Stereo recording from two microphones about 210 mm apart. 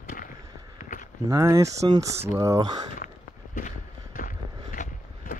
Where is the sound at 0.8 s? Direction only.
40° left (ahead or behind).